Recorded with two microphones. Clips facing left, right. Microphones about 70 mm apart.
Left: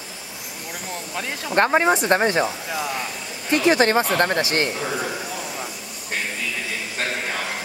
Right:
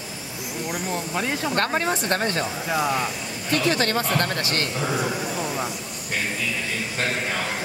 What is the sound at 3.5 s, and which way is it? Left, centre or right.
Speech, left.